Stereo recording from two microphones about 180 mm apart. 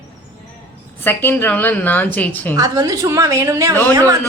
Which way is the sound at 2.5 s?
20° right (ahead or behind).